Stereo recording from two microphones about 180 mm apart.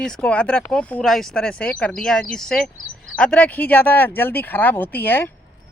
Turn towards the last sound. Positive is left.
turn(degrees=10)  # may be behind; listen again after turning